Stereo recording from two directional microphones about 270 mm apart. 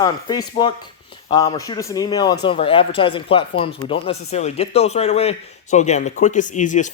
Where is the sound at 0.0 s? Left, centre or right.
Centre.